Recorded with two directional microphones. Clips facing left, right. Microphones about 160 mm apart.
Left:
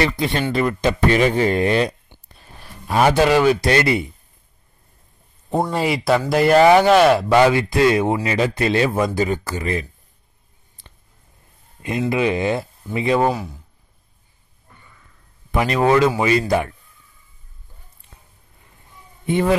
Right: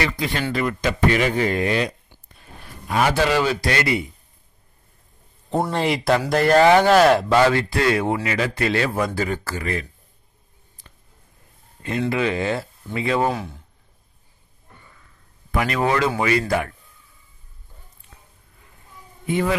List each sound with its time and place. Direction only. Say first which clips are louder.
0.0 s speech: left 4 dB; 25° left (ahead or behind)
3.2 s speech: left 5 dB; 15° left (ahead or behind)
5.5 s speech: left 1 dB; 5° left (ahead or behind)
7.2 s speech: left 3 dB; 15° left (ahead or behind)
12.1 s speech: left 4 dB; 15° left (ahead or behind)
13.2 s speech: left 3 dB; centre (ahead or behind)
15.5 s speech: left 5 dB; 20° left (ahead or behind)
19.2 s a man's voice: left 3 dB; 25° left (ahead or behind)